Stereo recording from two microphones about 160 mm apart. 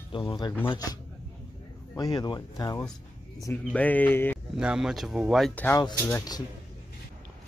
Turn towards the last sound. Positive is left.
turn(degrees=20)  # may be behind; listen again after turning